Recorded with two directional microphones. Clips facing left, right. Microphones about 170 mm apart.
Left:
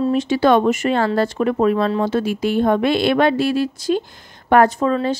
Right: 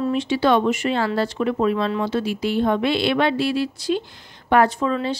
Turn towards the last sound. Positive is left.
turn(degrees=45)  # may be behind; listen again after turning